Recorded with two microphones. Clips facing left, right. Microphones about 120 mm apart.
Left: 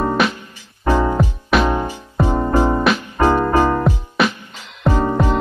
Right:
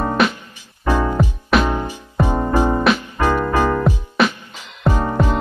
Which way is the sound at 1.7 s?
15° left (ahead or behind).